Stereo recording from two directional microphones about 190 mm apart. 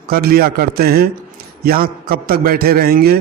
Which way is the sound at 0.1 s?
55° right (ahead or behind).